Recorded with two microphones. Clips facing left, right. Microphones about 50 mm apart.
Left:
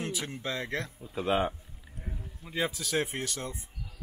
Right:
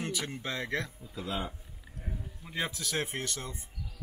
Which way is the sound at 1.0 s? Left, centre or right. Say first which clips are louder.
Left 8 dB; left.